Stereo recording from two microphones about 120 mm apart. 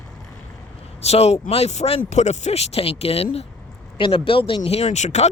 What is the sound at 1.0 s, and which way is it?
Speech, 60° left (ahead or behind).